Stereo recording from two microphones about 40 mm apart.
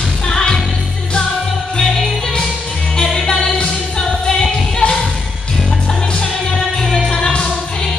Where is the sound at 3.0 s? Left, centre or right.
Centre.